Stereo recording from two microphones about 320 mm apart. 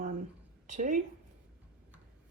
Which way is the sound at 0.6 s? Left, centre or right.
Right.